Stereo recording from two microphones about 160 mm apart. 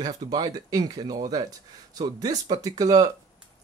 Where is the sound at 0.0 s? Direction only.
25° right (ahead or behind).